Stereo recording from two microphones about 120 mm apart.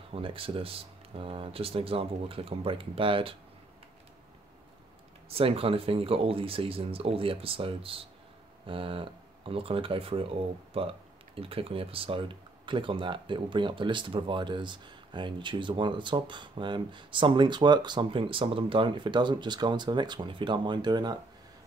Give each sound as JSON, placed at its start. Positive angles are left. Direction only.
{"t": 0.1, "sound": "speech", "side_deg": -50}
{"t": 5.3, "sound": "speech", "side_deg": -55}